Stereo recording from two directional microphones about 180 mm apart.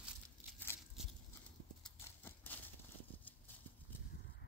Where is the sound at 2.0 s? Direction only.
10° left (ahead or behind).